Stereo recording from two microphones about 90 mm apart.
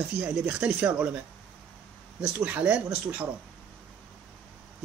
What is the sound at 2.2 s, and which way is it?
Speech, 15° right (ahead or behind).